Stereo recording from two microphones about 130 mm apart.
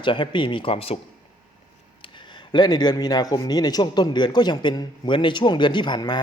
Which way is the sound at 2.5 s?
35° left (ahead or behind).